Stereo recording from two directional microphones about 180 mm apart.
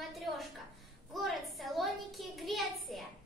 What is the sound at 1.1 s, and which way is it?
A child's voice, centre (ahead or behind).